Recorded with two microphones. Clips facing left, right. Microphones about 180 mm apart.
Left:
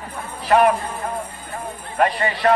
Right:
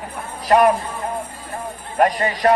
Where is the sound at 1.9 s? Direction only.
40° right (ahead or behind).